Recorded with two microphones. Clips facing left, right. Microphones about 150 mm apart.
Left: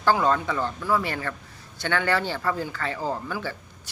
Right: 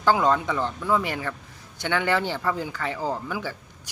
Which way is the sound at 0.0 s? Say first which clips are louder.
Right 1 dB; 15° right (ahead or behind).